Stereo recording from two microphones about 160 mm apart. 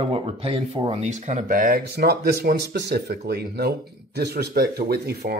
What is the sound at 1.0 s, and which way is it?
Speech, 50° right (ahead or behind).